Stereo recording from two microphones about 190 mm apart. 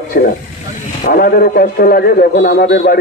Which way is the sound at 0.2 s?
60° left (ahead or behind).